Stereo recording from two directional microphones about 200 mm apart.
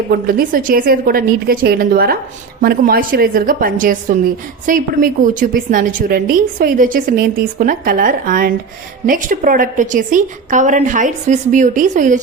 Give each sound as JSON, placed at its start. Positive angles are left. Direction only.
{"t": 0.1, "sound": "a woman's voice", "side_deg": -50}